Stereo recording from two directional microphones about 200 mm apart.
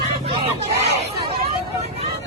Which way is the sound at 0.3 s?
30° right (ahead or behind).